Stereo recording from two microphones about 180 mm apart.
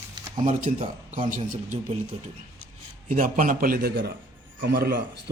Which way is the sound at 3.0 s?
50° right (ahead or behind).